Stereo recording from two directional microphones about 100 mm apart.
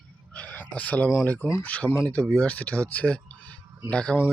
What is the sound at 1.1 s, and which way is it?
Speech, 20° left (ahead or behind).